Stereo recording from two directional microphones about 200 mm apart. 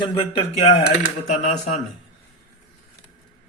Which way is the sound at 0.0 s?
25° left (ahead or behind).